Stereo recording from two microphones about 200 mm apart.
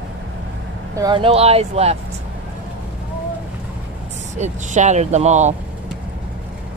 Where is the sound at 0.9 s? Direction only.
20° right (ahead or behind).